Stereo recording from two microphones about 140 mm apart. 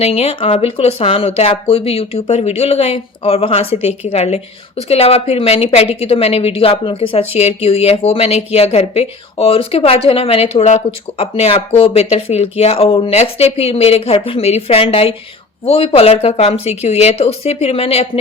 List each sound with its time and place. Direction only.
0.0 s speech: 45° left (ahead or behind)